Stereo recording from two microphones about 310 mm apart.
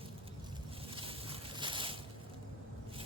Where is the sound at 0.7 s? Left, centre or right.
Centre.